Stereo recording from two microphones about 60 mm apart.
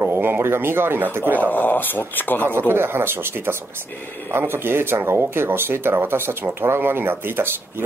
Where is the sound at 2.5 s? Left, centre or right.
Right.